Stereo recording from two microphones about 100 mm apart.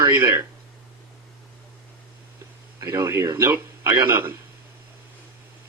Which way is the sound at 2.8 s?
25° right (ahead or behind).